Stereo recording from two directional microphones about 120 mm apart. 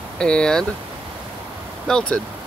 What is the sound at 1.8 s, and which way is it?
Speech, 5° left (ahead or behind).